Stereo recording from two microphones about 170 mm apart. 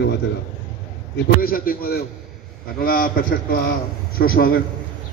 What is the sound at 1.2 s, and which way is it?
A man's voice, 60° left (ahead or behind).